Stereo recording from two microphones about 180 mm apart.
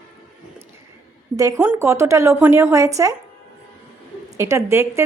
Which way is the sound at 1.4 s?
15° right (ahead or behind).